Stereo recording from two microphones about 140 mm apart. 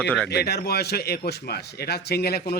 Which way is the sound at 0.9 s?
90° left.